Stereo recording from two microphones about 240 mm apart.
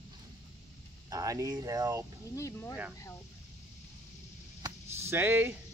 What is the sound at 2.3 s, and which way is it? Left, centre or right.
Speech, centre.